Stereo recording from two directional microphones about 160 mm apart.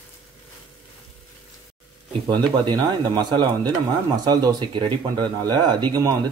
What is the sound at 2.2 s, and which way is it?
Speech, 25° right (ahead or behind).